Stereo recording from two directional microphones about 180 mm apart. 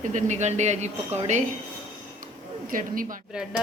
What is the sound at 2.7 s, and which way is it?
Speech, 50° right (ahead or behind).